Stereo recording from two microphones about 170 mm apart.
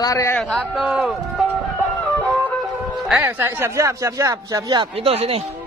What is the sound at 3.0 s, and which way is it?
Speech, 10° right (ahead or behind).